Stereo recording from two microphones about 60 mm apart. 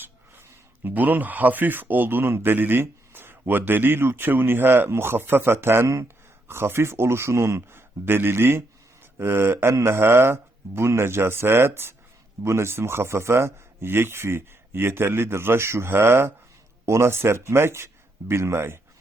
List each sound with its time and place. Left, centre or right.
0.9 s a man's voice: right